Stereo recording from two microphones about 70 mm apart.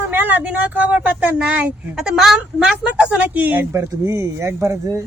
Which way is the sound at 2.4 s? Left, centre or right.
Centre.